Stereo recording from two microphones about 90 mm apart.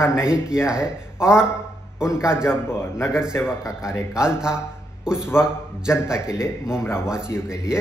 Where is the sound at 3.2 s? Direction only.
10° right (ahead or behind).